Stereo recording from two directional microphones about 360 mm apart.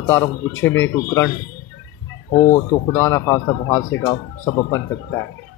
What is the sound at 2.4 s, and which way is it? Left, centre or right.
Speech, centre.